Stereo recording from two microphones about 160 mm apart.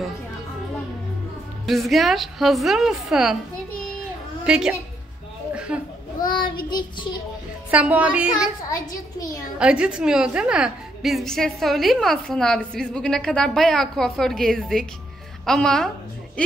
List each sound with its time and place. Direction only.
1.7 s a woman's voice: centre (ahead or behind)
4.5 s a woman's voice: 5° right (ahead or behind)
5.5 s a sound: 5° right (ahead or behind)
6.3 s child singing: 30° left (ahead or behind)
7.7 s a woman's voice: 10° right (ahead or behind)
8.6 s child singing: 20° left (ahead or behind)
9.6 s a woman's voice: 5° right (ahead or behind)